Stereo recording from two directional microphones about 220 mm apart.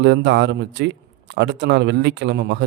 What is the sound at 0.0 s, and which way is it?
Speech, 50° right (ahead or behind).